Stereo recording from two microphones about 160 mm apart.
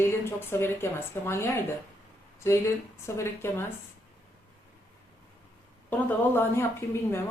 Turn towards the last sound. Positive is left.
turn(degrees=15)  # may be behind; listen again after turning